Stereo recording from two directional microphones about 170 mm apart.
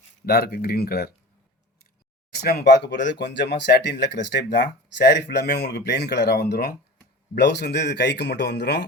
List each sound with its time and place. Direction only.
0.3 s speech: 65° left (ahead or behind)
2.3 s speech: 70° left (ahead or behind)
7.3 s speech: 80° left